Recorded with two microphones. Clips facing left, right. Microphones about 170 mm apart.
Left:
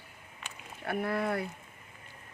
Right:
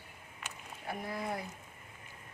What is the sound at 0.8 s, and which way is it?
Speech, 65° left (ahead or behind).